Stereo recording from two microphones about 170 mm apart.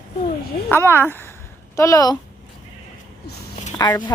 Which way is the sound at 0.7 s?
15° left (ahead or behind).